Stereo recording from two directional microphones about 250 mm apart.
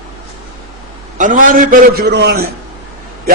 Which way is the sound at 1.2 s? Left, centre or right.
Right.